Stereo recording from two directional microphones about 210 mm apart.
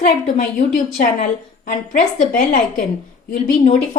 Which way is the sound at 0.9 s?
40° left (ahead or behind).